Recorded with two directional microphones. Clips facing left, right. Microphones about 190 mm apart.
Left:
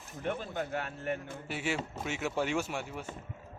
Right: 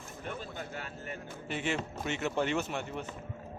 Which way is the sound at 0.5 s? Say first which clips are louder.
Left 6 dB; 60° left (ahead or behind).